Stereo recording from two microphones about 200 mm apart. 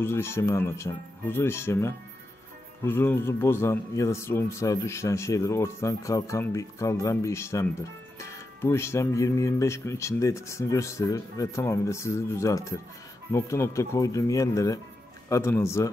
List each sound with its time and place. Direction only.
0.0 s speech: 10° left (ahead or behind)